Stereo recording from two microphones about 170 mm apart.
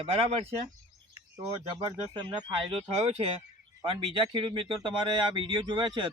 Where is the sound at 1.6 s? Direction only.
25° right (ahead or behind).